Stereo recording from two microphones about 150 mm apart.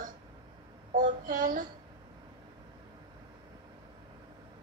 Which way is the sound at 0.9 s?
60° right (ahead or behind).